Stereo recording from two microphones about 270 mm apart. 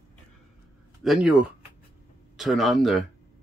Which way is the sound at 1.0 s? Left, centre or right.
Centre.